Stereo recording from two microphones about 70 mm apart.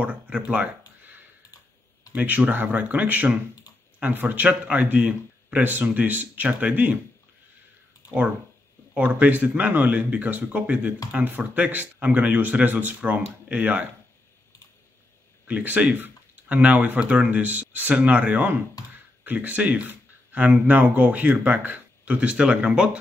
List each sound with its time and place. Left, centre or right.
0.0 s a sound: centre
2.1 s speech: right
8.9 s speech: right
15.4 s speech: right
18.8 s speech: left
19.2 s speech: right